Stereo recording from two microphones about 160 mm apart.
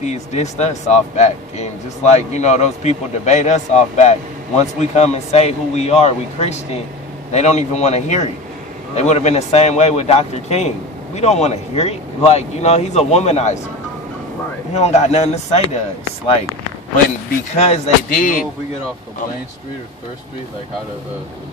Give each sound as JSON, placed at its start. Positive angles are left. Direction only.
{"t": 0.0, "sound": "a man's voice", "side_deg": 45}
{"t": 14.7, "sound": "a man's voice", "side_deg": 45}
{"t": 17.6, "sound": "speech", "side_deg": 40}
{"t": 18.1, "sound": "speech", "side_deg": 60}